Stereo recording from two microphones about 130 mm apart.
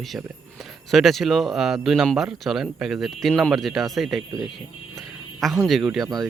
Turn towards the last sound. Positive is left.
turn(degrees=0)  # may be behind; listen again after turning